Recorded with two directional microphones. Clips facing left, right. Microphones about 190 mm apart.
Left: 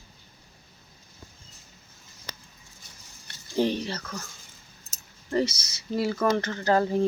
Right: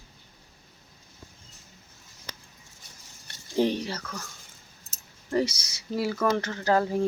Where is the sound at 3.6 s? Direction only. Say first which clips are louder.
Even; 15° right (ahead or behind).